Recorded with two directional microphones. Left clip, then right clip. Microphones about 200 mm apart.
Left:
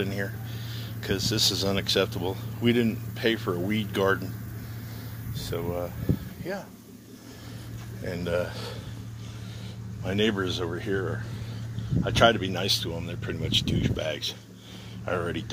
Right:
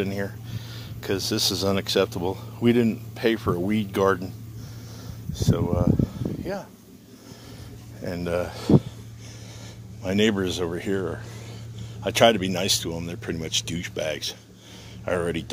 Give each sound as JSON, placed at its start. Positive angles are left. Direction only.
{"t": 0.0, "sound": "speech", "side_deg": -45}
{"t": 5.4, "sound": "speech", "side_deg": -50}
{"t": 8.0, "sound": "speech", "side_deg": -45}
{"t": 10.0, "sound": "speech", "side_deg": -50}